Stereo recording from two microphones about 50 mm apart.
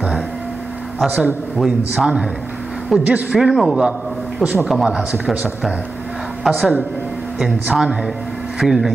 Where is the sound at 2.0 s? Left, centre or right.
Centre.